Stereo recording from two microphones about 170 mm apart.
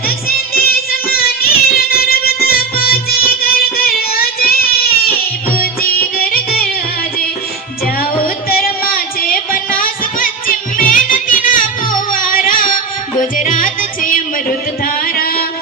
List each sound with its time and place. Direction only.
0.3 s child singing: 60° left (ahead or behind)
5.8 s music: 60° left (ahead or behind)
8.4 s music: 60° left (ahead or behind)